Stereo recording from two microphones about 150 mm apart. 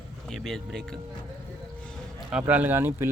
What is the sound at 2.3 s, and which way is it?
Speech, 10° right (ahead or behind).